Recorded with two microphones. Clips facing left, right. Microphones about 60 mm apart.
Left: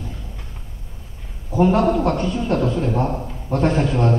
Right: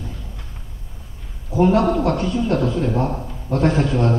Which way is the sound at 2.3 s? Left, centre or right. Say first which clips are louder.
Right 1 dB; left.